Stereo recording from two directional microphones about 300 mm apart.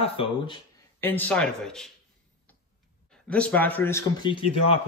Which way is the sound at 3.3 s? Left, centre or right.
Centre.